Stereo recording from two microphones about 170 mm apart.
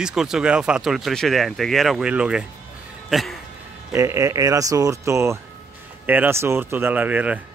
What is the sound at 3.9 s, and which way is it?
Speech, 15° right (ahead or behind).